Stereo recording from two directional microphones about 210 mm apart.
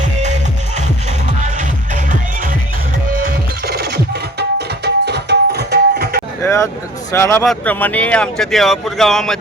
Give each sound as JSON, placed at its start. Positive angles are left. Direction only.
{"t": 0.0, "sound": "music", "side_deg": -35}
{"t": 3.2, "sound": "music", "side_deg": -45}
{"t": 6.4, "sound": "a sound", "side_deg": 15}
{"t": 7.1, "sound": "speech", "side_deg": 10}